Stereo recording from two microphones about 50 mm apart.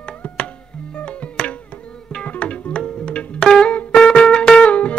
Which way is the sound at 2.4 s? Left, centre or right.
Left.